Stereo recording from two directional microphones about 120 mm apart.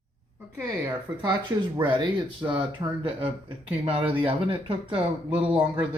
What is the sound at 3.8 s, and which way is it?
Speech, 50° right (ahead or behind).